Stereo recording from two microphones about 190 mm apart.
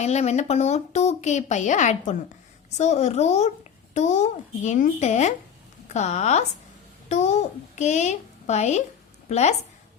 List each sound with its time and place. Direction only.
0.0 s a woman's voice: 35° left (ahead or behind)